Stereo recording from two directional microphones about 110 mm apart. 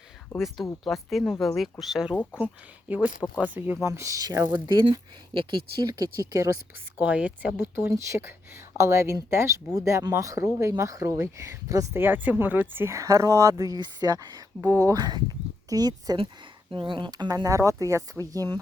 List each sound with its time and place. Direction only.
0.3 s speech: centre (ahead or behind)
3.4 s speech: 15° right (ahead or behind)
3.8 s speech: 30° right (ahead or behind); by 5.5 s 50° right (ahead or behind)
5.8 s speech: 35° right (ahead or behind)
7.0 s speech: 15° right (ahead or behind); by 14.4 s 35° right (ahead or behind)
14.6 s speech: 25° right (ahead or behind)
16.7 s speech: 50° right (ahead or behind)